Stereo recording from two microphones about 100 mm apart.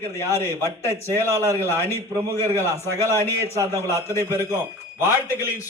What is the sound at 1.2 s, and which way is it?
A man's voice, 30° right (ahead or behind).